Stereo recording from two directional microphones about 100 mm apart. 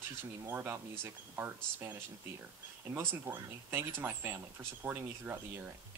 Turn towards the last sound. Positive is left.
turn(degrees=-20)  # may be behind; listen again after turning